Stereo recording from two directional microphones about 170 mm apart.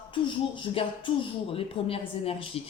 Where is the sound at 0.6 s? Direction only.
30° left (ahead or behind).